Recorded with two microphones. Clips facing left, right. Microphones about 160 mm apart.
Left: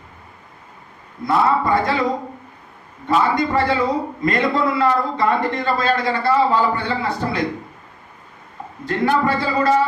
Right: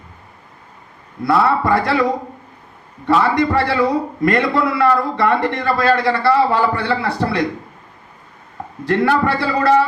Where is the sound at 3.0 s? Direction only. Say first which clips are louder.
Right 3 dB; 70° right (ahead or behind).